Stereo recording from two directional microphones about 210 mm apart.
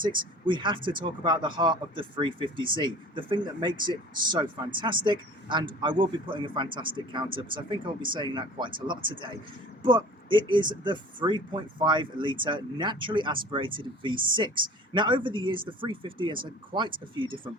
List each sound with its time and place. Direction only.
0.0 s speech: 20° right (ahead or behind)